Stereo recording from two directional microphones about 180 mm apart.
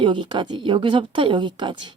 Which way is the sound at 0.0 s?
25° right (ahead or behind).